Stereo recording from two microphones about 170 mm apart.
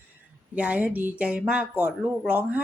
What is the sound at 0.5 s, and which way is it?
Speech, 10° right (ahead or behind).